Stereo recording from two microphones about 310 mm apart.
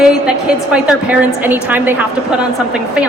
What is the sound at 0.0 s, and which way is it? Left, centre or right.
A woman's voice, centre.